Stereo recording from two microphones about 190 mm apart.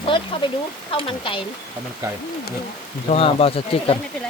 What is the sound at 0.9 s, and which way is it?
Speech, 25° left (ahead or behind).